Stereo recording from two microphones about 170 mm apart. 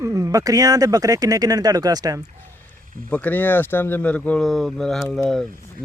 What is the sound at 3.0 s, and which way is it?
Speech, 10° left (ahead or behind).